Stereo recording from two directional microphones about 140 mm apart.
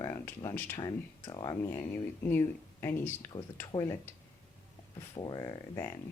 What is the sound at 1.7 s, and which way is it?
Speech, 15° left (ahead or behind).